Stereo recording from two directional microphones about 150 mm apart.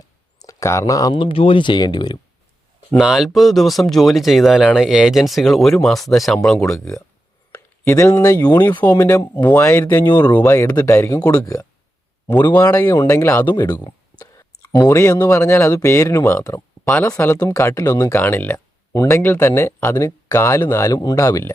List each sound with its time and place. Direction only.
0.3 s speech: 20° left (ahead or behind)
3.0 s speech: 5° right (ahead or behind)
6.6 s speech: 20° left (ahead or behind)
10.1 s speech: 30° left (ahead or behind); by 11.4 s 15° left (ahead or behind)
12.6 s speech: 20° left (ahead or behind)
13.7 s speech: 25° left (ahead or behind)